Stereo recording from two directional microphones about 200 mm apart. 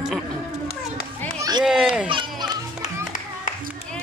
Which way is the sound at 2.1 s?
25° right (ahead or behind).